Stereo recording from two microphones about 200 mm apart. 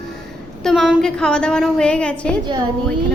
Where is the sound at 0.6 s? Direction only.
Centre (ahead or behind).